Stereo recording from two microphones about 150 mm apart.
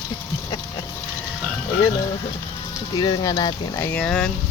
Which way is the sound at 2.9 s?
25° left (ahead or behind).